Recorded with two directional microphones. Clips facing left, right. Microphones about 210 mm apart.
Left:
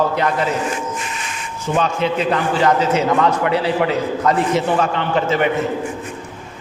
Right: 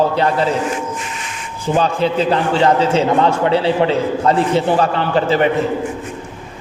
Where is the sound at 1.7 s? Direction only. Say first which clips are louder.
Right 3 dB; 35° right (ahead or behind).